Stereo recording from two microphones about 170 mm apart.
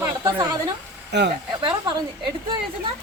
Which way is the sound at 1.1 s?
90° right.